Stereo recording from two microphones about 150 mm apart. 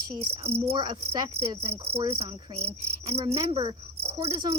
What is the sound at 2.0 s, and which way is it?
Cricket, 40° right (ahead or behind).